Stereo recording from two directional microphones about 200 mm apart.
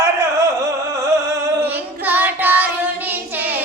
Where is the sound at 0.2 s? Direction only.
15° right (ahead or behind).